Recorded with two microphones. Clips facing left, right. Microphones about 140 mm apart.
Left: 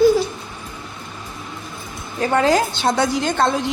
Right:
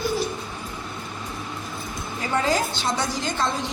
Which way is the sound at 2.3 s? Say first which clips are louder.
Left 6 dB; 70° left (ahead or behind).